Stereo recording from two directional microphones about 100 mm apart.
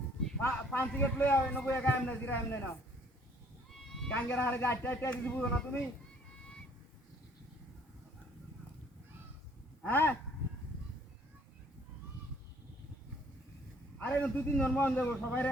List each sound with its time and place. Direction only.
0.4 s a man's voice: 20° left (ahead or behind)
4.1 s a man's voice: 20° left (ahead or behind)
9.8 s a man's voice: 20° left (ahead or behind)
14.0 s a man's voice: 15° left (ahead or behind)